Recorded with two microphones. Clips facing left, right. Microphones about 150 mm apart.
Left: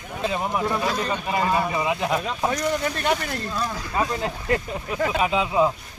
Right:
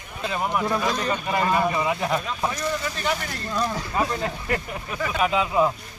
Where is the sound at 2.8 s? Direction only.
55° left (ahead or behind).